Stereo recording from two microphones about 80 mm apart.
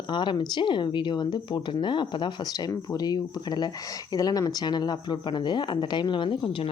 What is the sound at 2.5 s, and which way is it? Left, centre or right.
Speech, left.